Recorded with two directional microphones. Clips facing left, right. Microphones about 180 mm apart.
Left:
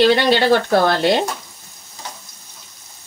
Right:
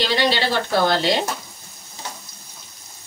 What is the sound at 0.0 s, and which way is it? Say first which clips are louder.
Speech: left 7 dB; 55° left (ahead or behind).